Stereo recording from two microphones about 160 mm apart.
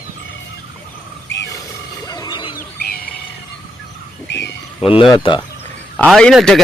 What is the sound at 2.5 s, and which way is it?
Wild animals, 70° left (ahead or behind).